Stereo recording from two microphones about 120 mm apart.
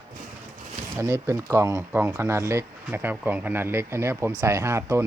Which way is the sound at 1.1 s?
25° right (ahead or behind).